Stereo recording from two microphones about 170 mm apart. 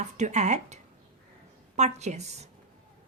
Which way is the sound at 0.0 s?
45° right (ahead or behind).